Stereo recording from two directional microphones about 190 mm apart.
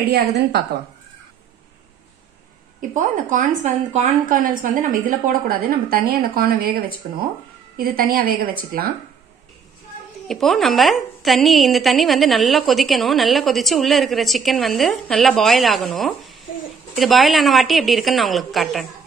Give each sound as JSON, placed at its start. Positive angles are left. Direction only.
{"t": 0.1, "sound": "a woman's voice", "side_deg": -60}
{"t": 2.9, "sound": "a woman's voice", "side_deg": -40}
{"t": 10.2, "sound": "a woman's voice", "side_deg": 0}